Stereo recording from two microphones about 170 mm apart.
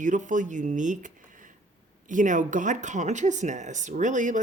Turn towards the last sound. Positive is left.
turn(degrees=-45)  # may be behind; listen again after turning